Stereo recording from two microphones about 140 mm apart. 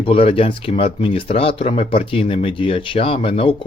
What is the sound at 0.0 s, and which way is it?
Speech, 40° left (ahead or behind).